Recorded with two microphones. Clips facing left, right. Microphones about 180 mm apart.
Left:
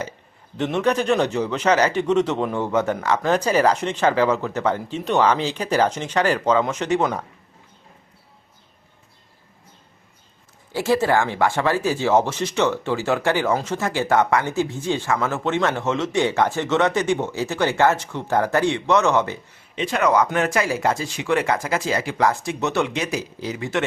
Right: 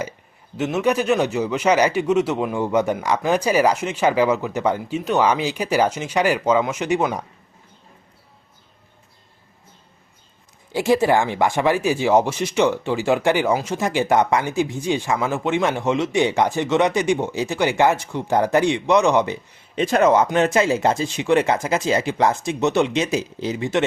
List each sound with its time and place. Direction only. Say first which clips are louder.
0.5 s speech: right 1 dB; 5° right (ahead or behind)
10.7 s speech: right 2 dB; 15° right (ahead or behind)
19.7 s a man's voice: right 5 dB; 40° right (ahead or behind)
20.0 s speech: right 3 dB; 25° right (ahead or behind)